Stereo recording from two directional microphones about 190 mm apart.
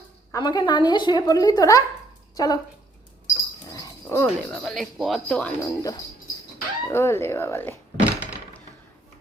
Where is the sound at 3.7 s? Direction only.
15° left (ahead or behind).